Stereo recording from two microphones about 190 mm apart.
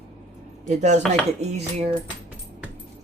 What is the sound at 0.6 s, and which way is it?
Speech, 40° right (ahead or behind).